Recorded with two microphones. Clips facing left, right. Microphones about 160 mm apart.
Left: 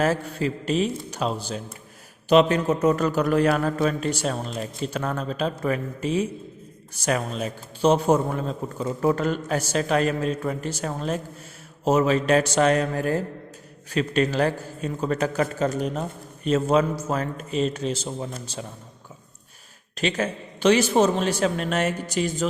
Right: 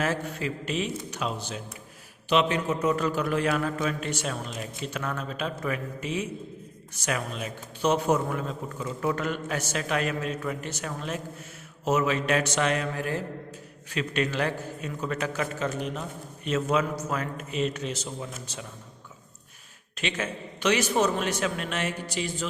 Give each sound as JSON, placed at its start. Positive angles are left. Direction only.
{"t": 0.0, "sound": "speech", "side_deg": 35}
{"t": 20.0, "sound": "speech", "side_deg": 35}